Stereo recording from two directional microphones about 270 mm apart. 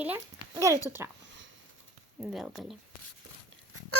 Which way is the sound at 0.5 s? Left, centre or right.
Centre.